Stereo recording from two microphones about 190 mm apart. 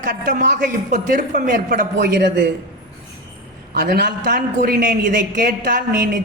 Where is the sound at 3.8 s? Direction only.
55° right (ahead or behind).